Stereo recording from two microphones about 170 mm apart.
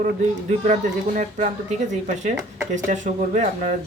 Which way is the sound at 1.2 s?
45° right (ahead or behind).